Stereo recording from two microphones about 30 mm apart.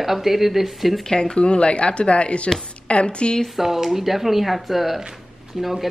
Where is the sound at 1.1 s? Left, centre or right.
Left.